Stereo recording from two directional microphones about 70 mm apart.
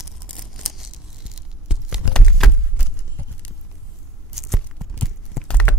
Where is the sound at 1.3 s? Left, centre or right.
Centre.